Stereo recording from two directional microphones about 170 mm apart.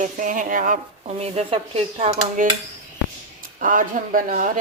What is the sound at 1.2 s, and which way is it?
Speech, 35° right (ahead or behind).